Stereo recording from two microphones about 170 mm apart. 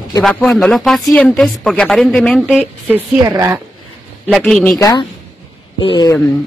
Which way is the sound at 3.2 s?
20° right (ahead or behind).